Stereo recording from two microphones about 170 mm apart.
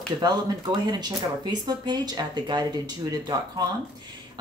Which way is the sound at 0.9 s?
25° right (ahead or behind).